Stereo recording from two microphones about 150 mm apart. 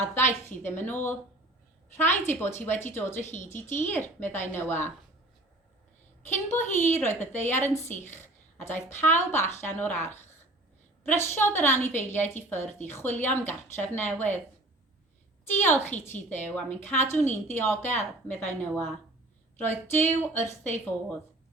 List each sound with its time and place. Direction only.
0.0 s a woman's voice: 15° left (ahead or behind)
3.2 s speech: 50° left (ahead or behind)
3.5 s a woman's voice: 15° left (ahead or behind)
6.7 s a woman's voice: 15° left (ahead or behind)
15.5 s a woman's voice: 15° left (ahead or behind)